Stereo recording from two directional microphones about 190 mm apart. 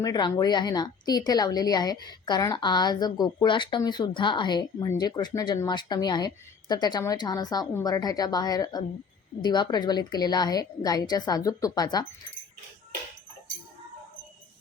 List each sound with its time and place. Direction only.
0.0 s speech: 20° left (ahead or behind)